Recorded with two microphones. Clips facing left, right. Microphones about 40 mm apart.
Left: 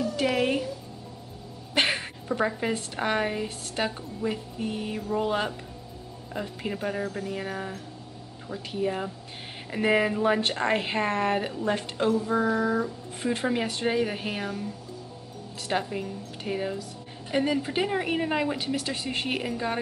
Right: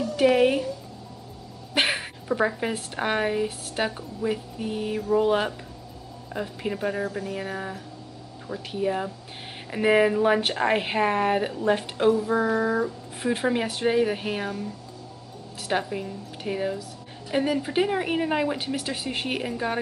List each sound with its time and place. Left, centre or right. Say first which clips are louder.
0.4 s a sound: right 5 dB; centre
2.2 s a woman's voice: right 2 dB; centre
6.6 s a woman's voice: right 3 dB; centre
11.7 s speech: right 4 dB; centre
13.5 s a woman's voice: right 4 dB; centre
15.7 s a woman's voice: right 2 dB; centre